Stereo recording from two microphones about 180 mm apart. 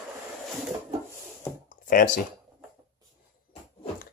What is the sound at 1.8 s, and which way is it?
Speech, 50° left (ahead or behind).